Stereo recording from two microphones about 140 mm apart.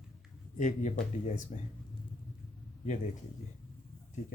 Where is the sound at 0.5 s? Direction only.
65° left (ahead or behind).